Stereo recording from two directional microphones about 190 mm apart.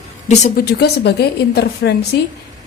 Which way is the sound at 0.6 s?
55° left (ahead or behind).